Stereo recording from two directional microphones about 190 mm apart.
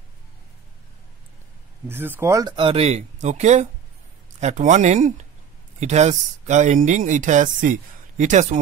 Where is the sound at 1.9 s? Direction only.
10° right (ahead or behind).